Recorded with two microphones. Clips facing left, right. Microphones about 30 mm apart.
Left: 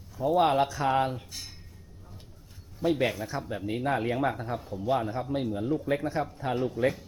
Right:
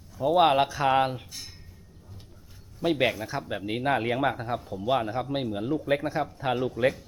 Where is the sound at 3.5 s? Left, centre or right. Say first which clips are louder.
Right 3 dB; right.